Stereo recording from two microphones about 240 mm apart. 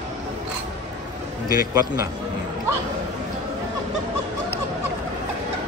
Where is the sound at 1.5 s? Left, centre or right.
Centre.